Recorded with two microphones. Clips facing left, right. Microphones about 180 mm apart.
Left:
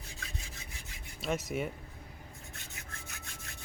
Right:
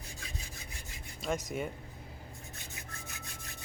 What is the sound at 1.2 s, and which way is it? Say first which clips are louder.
Speech: left 1 dB; 5° left (ahead or behind).